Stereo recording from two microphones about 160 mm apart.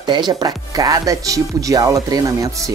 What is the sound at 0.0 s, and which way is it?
Speech, 25° right (ahead or behind).